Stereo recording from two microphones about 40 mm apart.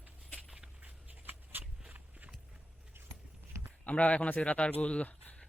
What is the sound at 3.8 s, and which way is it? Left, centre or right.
Speech, left.